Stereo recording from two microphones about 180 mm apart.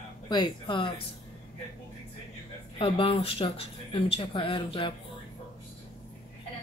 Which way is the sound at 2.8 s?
30° left (ahead or behind).